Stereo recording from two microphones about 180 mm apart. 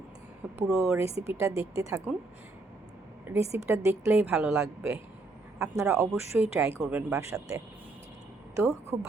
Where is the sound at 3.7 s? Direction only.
15° right (ahead or behind).